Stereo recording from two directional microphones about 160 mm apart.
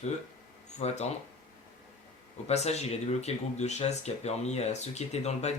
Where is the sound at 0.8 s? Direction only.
40° left (ahead or behind).